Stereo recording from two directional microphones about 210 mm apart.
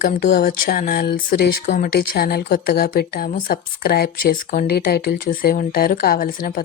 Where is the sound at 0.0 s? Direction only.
40° left (ahead or behind).